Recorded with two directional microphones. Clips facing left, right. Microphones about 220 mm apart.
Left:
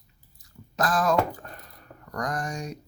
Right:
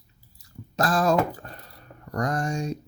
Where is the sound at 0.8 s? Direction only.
30° right (ahead or behind).